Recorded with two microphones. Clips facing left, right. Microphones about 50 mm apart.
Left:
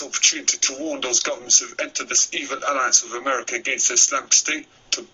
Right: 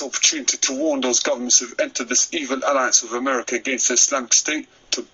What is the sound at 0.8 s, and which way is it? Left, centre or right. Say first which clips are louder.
Speech: right 6 dB; left.